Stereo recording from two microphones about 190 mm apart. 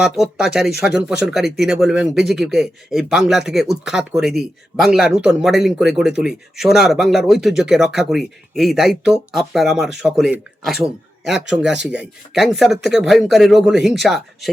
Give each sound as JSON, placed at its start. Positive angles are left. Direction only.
{"t": 0.0, "sound": "speech", "side_deg": -5}